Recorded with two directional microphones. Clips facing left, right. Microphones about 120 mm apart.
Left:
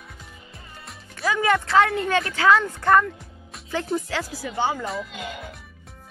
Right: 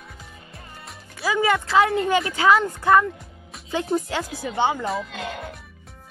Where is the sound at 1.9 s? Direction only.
25° right (ahead or behind); by 3.1 s 10° right (ahead or behind).